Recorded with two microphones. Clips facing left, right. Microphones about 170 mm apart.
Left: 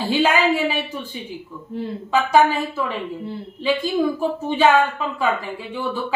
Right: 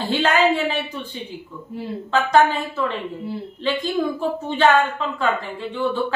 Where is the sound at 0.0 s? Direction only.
10° left (ahead or behind).